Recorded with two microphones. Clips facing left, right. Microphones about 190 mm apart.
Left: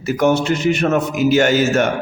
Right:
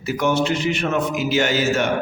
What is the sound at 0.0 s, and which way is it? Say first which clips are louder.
A man's voice: left 4 dB; 45° left (ahead or behind).